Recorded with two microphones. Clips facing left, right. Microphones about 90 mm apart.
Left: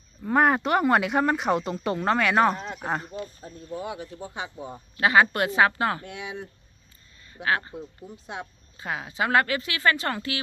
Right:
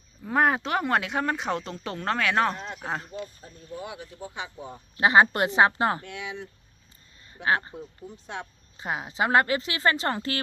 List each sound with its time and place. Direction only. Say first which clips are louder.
0.2 s speech: left 2 dB; centre (ahead or behind)
3.2 s speech: left 2 dB; 25° left (ahead or behind)
4.9 s speech: right 1 dB; 25° right (ahead or behind)
6.0 s speech: even; 20° left (ahead or behind)
7.4 s speech: right 1 dB; 25° right (ahead or behind)
7.7 s speech: left 1 dB; 10° left (ahead or behind)
8.8 s speech: right 1 dB; 25° right (ahead or behind)